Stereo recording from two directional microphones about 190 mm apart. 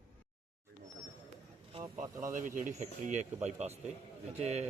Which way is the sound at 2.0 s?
45° right (ahead or behind).